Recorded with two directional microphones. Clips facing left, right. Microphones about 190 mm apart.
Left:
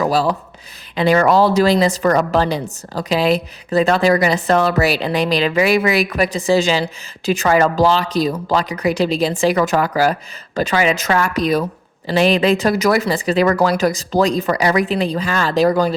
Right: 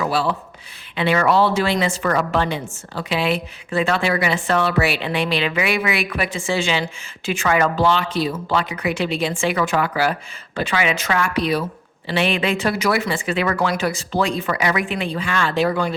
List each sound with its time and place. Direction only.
0.0 s a woman's voice: 40° left (ahead or behind)